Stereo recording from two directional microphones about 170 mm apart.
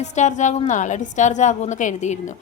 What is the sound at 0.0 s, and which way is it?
A woman's voice, 45° left (ahead or behind).